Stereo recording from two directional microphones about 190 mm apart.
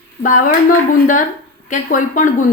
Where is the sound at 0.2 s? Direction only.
45° left (ahead or behind).